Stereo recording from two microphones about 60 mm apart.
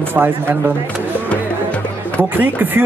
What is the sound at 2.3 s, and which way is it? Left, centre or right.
Speech, right.